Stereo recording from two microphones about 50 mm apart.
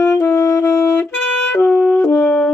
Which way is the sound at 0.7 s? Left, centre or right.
Left.